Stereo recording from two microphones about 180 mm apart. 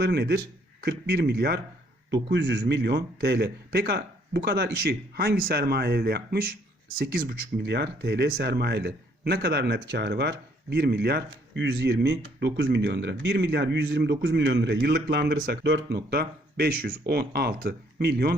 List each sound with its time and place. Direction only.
0.0 s a man's voice: 65° right (ahead or behind)
2.3 s a man's voice: 75° right (ahead or behind)